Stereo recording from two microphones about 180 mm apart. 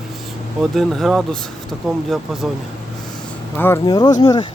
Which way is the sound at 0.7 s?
Centre (ahead or behind).